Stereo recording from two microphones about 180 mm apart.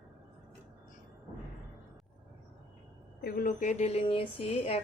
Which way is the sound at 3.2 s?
55° left (ahead or behind).